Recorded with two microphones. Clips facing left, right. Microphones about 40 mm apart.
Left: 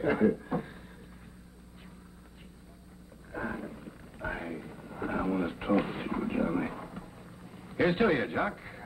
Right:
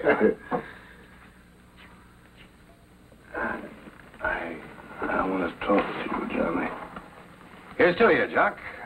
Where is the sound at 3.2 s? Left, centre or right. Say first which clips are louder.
Right 6 dB; right.